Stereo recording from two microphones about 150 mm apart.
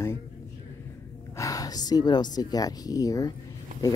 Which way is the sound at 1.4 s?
25° left (ahead or behind).